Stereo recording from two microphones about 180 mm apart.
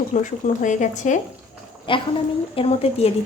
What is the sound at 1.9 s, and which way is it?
A woman's voice, 30° left (ahead or behind).